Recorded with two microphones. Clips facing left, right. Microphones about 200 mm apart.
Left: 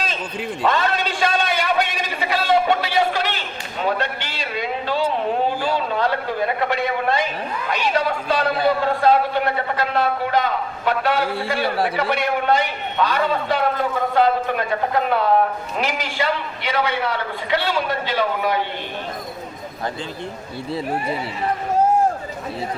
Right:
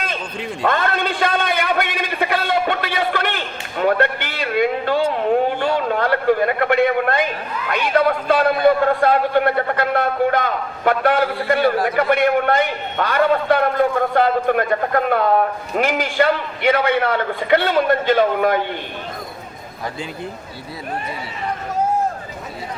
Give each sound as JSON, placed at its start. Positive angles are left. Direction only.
{"t": 0.6, "sound": "a man's voice", "side_deg": -55}